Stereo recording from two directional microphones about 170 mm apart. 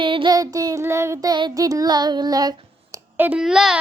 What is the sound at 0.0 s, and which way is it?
Speech, 30° right (ahead or behind).